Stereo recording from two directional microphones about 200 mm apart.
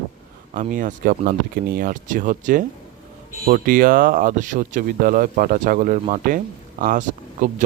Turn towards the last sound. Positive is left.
turn(degrees=-40)  # may be behind; listen again after turning